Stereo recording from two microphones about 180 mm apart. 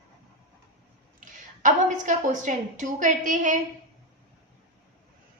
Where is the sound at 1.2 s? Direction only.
45° right (ahead or behind).